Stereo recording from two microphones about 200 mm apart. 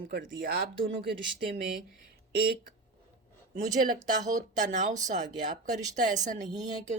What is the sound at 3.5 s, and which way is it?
Speech, 40° right (ahead or behind).